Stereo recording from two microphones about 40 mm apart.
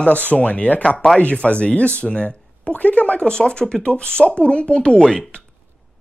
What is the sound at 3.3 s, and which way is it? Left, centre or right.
Speech, left.